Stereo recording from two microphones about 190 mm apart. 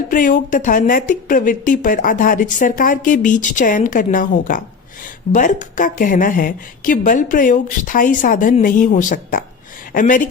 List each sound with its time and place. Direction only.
0.1 s speech: 45° left (ahead or behind)